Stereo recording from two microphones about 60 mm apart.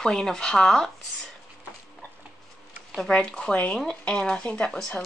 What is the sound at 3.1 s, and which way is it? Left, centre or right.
Speech, centre.